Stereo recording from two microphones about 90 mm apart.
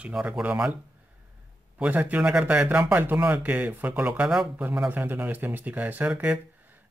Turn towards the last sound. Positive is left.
turn(degrees=-15)  # may be behind; listen again after turning